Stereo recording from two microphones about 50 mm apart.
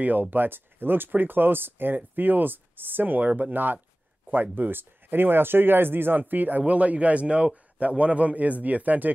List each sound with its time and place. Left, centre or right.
0.0 s a man's voice: right